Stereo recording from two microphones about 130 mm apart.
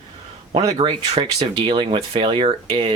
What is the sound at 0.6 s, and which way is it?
Speech, 30° right (ahead or behind).